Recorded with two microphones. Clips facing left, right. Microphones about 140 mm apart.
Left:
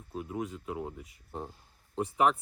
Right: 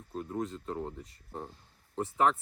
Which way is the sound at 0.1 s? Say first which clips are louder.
Right 1 dB; 5° left (ahead or behind).